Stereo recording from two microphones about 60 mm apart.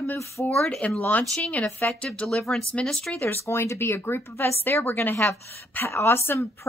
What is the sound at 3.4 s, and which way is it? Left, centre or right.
A woman's voice, left.